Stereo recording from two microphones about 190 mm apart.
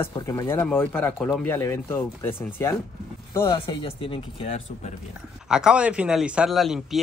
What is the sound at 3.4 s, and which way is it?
Speech, 25° left (ahead or behind).